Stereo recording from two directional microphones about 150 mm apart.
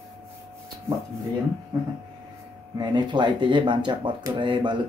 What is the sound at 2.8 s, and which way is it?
Speech, 30° right (ahead or behind).